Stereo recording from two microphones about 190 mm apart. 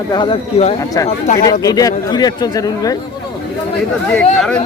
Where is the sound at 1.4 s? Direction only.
20° left (ahead or behind).